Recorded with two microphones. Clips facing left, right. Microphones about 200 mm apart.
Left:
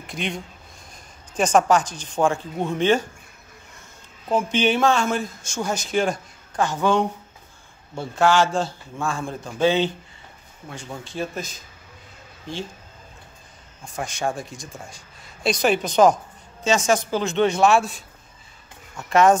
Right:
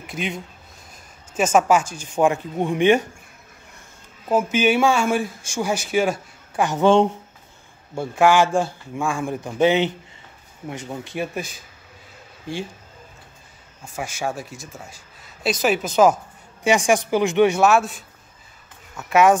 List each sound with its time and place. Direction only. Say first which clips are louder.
0.0 s speech: right 1 dB; 5° right (ahead or behind)
4.3 s speech: right 2 dB; 5° right (ahead or behind); by 7.1 s 25° right (ahead or behind)
7.9 s speech: right 2 dB; 10° right (ahead or behind)
13.9 s speech: left 1 dB; 5° right (ahead or behind)